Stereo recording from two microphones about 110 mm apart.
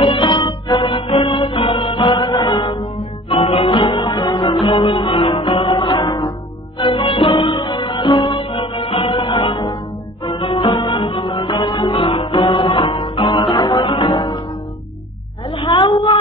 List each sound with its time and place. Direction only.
0.0 s music: 50° left (ahead or behind)
2.0 s music: 40° left (ahead or behind)
3.3 s music: 65° left (ahead or behind)
3.8 s music: 45° left (ahead or behind)
4.5 s music: 55° left (ahead or behind); by 8.5 s 40° left (ahead or behind)
8.5 s music: 50° left (ahead or behind)
11.5 s music: 35° left (ahead or behind)
11.9 s music: 55° left (ahead or behind)
15.4 s a sound: 55° left (ahead or behind)
15.9 s a sound: 40° left (ahead or behind)